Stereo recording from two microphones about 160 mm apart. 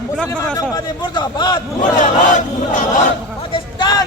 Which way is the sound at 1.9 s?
50° left (ahead or behind).